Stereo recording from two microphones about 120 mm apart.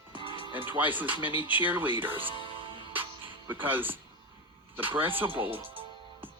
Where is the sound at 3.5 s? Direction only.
15° right (ahead or behind).